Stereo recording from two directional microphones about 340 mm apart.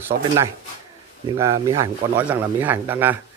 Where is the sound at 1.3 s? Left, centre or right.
Centre.